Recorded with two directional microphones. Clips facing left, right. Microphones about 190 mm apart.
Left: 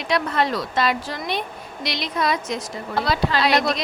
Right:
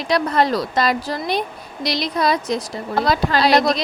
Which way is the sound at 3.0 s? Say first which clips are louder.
Right 3 dB; 45° right (ahead or behind).